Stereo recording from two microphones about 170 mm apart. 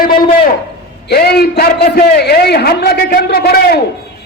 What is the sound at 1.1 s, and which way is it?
A man's voice, 65° left (ahead or behind).